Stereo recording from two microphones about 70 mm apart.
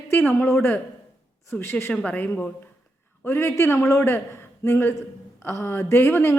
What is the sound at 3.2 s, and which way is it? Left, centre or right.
A man's voice, left.